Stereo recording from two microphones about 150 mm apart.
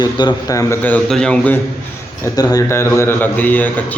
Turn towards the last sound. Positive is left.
turn(degrees=10)  # may be behind; listen again after turning